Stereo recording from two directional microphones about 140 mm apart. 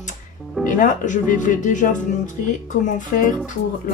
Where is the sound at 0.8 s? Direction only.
65° left (ahead or behind).